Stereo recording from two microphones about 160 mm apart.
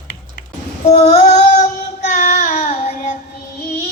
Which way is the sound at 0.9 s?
50° left (ahead or behind).